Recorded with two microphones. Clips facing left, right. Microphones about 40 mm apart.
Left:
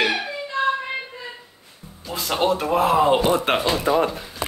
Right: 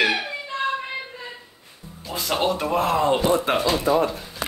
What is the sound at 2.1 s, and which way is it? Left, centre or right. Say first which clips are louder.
Speech: left 2 dB; centre.